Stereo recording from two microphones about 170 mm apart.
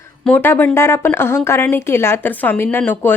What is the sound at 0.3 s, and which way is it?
Speech, 10° left (ahead or behind).